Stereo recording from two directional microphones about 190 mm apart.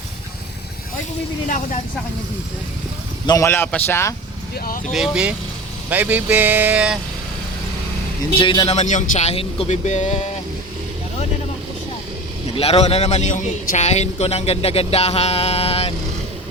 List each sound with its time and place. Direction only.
1.5 s a man's voice: 40° left (ahead or behind)
3.2 s a man's voice: 15° left (ahead or behind)
4.5 s speech: 50° left (ahead or behind)
4.9 s speech: centre (ahead or behind)
5.9 s vehicle: 10° right (ahead or behind)
8.4 s a man's voice: 25° left (ahead or behind)
12.5 s a man's voice: 30° left (ahead or behind)